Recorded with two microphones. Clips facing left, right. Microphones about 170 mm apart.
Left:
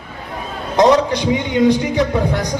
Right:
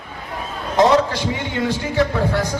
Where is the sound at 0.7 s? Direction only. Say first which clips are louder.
Left 2 dB; 15° left (ahead or behind).